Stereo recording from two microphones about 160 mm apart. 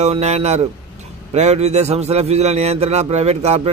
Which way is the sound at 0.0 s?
45° right (ahead or behind).